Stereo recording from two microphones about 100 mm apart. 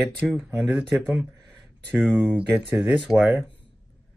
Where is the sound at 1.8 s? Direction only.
15° right (ahead or behind).